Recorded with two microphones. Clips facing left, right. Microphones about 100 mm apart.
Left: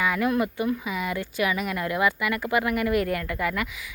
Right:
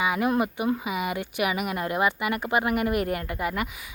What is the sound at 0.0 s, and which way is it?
Speech, 20° right (ahead or behind).